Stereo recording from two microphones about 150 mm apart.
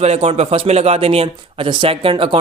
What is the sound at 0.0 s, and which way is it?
A man's voice, 45° right (ahead or behind).